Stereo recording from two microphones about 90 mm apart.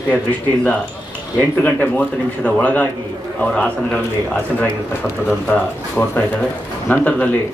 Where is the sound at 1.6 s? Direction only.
15° left (ahead or behind).